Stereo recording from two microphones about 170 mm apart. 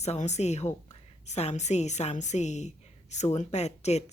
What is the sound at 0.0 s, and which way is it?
A woman's voice, 40° left (ahead or behind).